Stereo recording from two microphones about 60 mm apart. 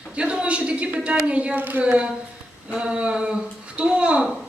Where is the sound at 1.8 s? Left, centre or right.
Centre.